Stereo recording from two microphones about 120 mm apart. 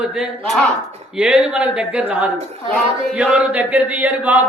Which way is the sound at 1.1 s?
10° right (ahead or behind).